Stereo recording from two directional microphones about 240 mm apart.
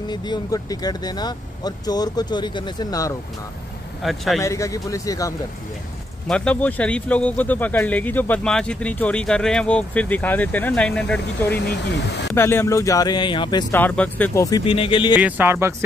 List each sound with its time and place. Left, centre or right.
0.1 s speech: centre
4.0 s speech: centre
4.4 s speech: centre
15.1 s speech: centre